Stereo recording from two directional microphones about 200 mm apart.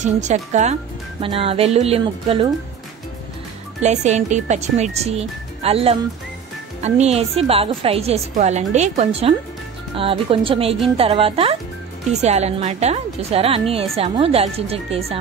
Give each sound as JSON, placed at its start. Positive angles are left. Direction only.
{"t": 0.0, "sound": "a woman's voice", "side_deg": -35}
{"t": 3.8, "sound": "a woman's voice", "side_deg": -35}